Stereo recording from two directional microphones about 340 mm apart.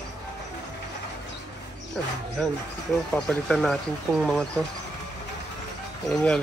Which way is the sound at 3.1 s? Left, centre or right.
Centre.